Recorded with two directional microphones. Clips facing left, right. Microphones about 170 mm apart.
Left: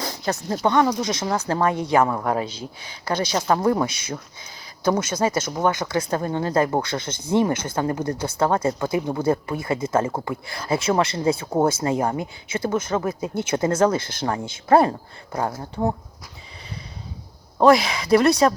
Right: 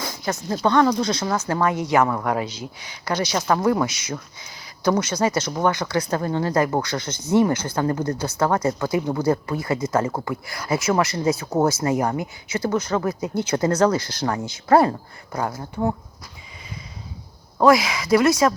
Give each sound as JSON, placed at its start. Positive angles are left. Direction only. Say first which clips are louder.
{"t": 0.3, "sound": "speech", "louder": "right 1 dB", "side_deg": 25}
{"t": 17.6, "sound": "speech", "louder": "left 1 dB", "side_deg": 30}